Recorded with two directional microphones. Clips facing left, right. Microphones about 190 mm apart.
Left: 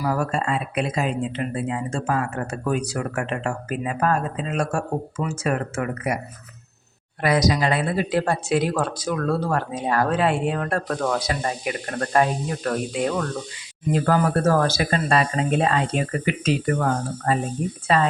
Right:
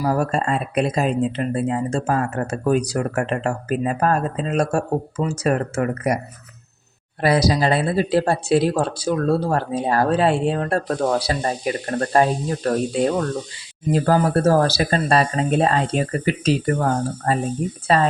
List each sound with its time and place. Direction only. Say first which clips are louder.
0.0 s speech: right 3 dB; 35° right (ahead or behind)
7.2 s speech: right 2 dB; 30° right (ahead or behind)